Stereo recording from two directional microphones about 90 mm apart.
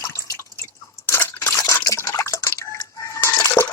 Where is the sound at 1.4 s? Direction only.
35° left (ahead or behind).